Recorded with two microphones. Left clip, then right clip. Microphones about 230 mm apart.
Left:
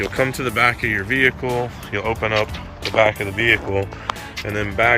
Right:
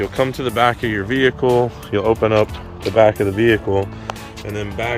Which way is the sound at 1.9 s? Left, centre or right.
Right.